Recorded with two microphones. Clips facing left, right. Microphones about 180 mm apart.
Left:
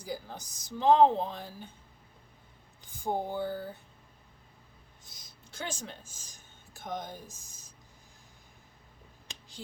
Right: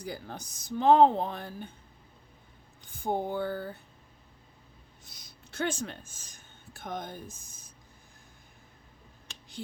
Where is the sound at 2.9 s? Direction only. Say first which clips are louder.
Right 2 dB; 60° right (ahead or behind).